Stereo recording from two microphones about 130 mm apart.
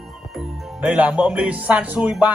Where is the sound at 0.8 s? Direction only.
10° right (ahead or behind).